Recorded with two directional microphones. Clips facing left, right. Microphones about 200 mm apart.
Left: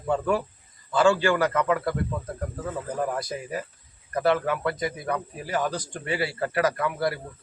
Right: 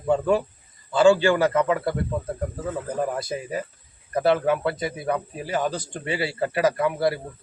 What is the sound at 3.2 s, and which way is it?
Speech, 25° right (ahead or behind).